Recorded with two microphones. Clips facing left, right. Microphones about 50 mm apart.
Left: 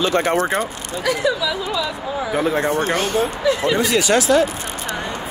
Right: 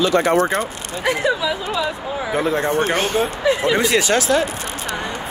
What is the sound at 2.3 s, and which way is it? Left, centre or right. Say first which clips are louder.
Speech: even; centre.